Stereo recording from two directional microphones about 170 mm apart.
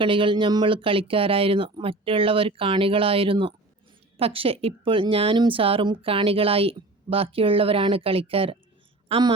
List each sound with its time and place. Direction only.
0.0 s a woman's voice: 30° right (ahead or behind)